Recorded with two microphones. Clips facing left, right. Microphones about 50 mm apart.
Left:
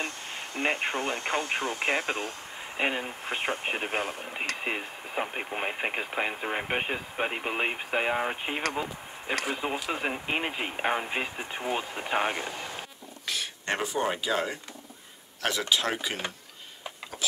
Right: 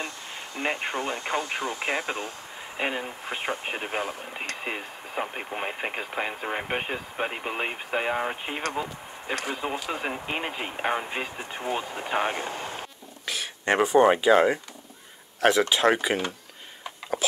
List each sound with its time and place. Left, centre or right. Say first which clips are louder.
0.6 s speech: even; centre
12.4 s speech: right 3 dB; right
13.2 s a sound: right 1 dB; centre
13.7 s speech: right 10 dB; right
15.7 s speech: right 6 dB; right